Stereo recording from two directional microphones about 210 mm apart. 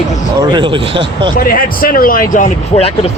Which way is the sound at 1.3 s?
45° left (ahead or behind).